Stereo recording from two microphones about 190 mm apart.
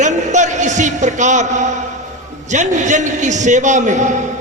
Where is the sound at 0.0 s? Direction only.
40° right (ahead or behind).